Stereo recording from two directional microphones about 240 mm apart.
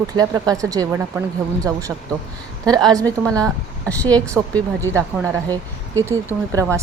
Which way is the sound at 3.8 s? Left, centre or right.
Centre.